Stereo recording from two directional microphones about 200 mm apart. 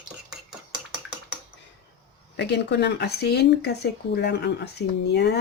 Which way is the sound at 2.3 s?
60° left (ahead or behind).